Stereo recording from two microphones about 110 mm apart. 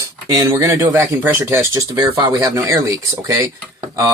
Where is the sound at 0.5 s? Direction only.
25° right (ahead or behind).